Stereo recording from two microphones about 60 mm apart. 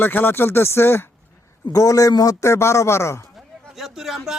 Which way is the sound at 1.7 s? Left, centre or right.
Left.